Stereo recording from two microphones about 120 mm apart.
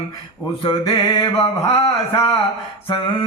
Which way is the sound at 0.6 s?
50° left (ahead or behind).